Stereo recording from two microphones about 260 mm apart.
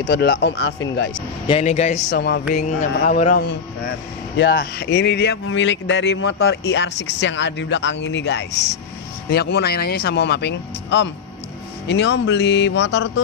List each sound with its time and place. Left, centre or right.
0.0 s speech: left
1.5 s a man's voice: left
2.0 s speech: left
2.5 s a man's voice: left